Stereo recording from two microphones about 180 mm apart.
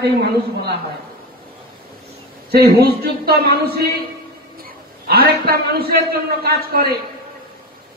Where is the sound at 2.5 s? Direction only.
60° right (ahead or behind).